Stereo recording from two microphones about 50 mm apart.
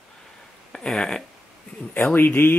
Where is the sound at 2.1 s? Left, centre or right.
Left.